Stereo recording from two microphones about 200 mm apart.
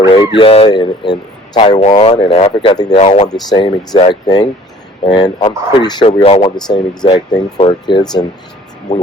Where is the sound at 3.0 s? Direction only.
35° left (ahead or behind).